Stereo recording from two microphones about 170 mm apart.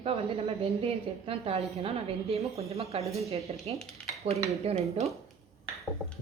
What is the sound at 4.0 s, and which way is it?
Cutlery, 5° left (ahead or behind).